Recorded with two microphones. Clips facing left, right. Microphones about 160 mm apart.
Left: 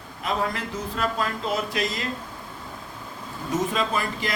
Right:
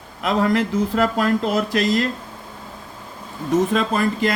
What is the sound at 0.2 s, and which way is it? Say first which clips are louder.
Speech: right 8 dB; 90° right.